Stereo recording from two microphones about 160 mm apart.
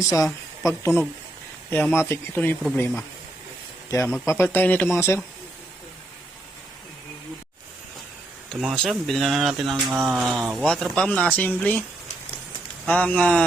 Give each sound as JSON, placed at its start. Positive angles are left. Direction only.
{"t": 0.6, "sound": "speech", "side_deg": 20}
{"t": 8.6, "sound": "speech", "side_deg": 0}
{"t": 12.9, "sound": "speech", "side_deg": 10}